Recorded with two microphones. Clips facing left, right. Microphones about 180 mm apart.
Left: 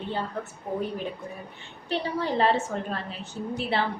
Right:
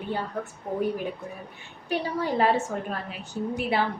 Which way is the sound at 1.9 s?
10° right (ahead or behind).